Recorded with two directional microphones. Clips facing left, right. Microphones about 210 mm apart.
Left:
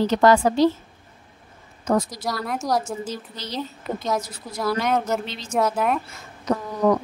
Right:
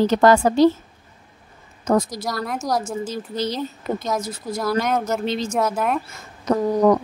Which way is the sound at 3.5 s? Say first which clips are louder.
Right 3 dB; centre (ahead or behind).